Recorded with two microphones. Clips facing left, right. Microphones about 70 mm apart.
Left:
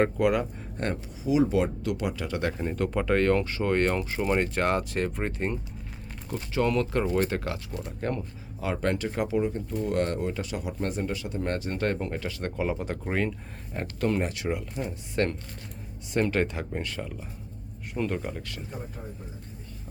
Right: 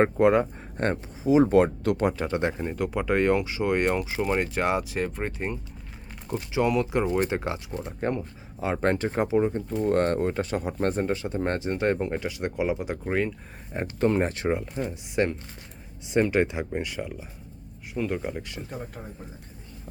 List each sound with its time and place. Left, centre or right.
0.0 s speech: right
2.6 s speech: centre
6.3 s speech: centre
9.8 s speech: right; by 13.3 s centre
13.7 s speech: right
14.8 s speech: centre
18.2 s speech: centre